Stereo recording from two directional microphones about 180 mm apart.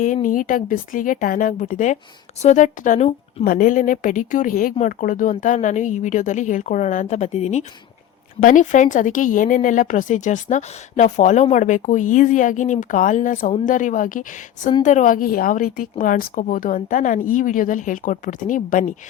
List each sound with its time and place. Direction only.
0.0 s speech: 45° left (ahead or behind)